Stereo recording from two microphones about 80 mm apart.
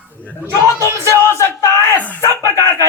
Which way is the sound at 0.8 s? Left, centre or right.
Right.